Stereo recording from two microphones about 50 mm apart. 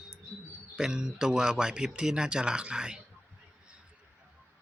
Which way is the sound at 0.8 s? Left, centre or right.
Centre.